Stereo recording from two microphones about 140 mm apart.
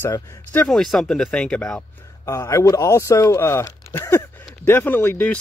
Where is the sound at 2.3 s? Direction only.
20° left (ahead or behind).